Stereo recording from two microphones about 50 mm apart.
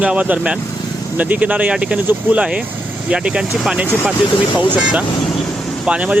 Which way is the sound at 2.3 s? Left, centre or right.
Right.